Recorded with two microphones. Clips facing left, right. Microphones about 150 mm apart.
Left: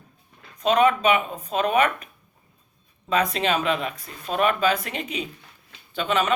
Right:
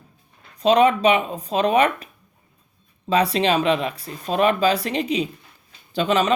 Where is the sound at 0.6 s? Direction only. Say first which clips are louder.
Right 3 dB; 30° right (ahead or behind).